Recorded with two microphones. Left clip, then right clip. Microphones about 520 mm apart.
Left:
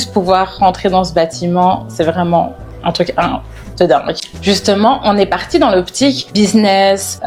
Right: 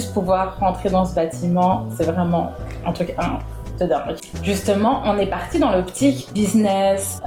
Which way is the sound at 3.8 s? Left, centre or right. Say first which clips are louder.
Left 10 dB; left.